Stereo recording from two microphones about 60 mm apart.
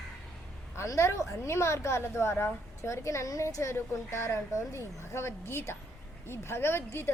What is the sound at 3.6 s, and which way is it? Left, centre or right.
A woman's voice, left.